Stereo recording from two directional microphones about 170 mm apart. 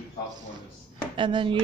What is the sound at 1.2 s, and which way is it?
Speech, 30° right (ahead or behind).